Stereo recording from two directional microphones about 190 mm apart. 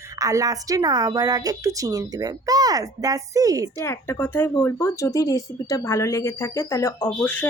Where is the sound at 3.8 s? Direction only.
15° left (ahead or behind).